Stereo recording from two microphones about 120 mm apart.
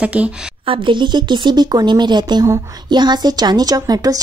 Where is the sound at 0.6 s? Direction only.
40° right (ahead or behind).